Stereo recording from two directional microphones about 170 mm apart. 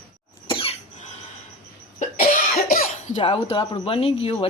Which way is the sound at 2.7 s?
50° left (ahead or behind).